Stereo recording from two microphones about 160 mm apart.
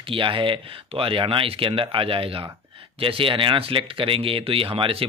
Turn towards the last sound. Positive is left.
turn(degrees=-35)  # may be behind; listen again after turning